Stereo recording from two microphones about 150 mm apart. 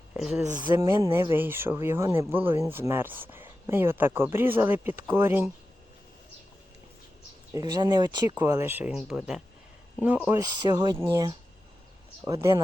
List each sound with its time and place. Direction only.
0.1 s a sound: 5° right (ahead or behind)
0.7 s speech: 15° right (ahead or behind)
7.5 s speech: 25° right (ahead or behind); by 10.3 s 10° right (ahead or behind)
10.3 s speech: 25° right (ahead or behind)
12.2 s speech: 20° right (ahead or behind)